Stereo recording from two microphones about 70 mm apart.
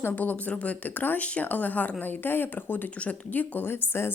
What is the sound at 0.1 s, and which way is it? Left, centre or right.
A woman's voice, left.